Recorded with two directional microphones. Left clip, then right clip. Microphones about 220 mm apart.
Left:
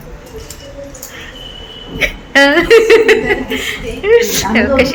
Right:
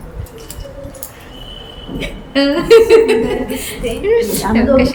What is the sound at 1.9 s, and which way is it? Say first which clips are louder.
A woman's voice: left 7 dB; centre (ahead or behind).